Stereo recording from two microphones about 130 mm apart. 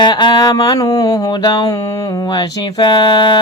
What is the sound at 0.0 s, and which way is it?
Speech, 35° left (ahead or behind).